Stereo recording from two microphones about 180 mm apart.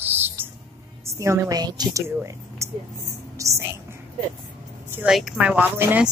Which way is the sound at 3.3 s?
15° right (ahead or behind).